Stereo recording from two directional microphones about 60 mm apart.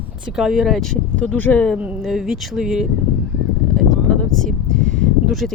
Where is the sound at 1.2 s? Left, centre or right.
Left.